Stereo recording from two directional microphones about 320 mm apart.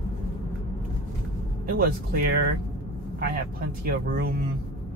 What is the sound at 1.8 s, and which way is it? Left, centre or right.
Speech, right.